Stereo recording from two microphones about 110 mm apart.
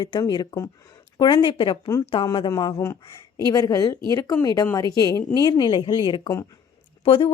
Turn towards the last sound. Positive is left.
turn(degrees=55)  # may be behind; listen again after turning